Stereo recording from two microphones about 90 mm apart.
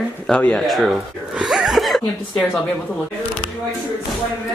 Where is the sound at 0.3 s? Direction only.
10° left (ahead or behind).